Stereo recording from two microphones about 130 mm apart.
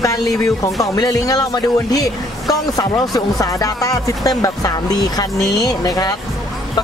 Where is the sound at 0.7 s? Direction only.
25° left (ahead or behind).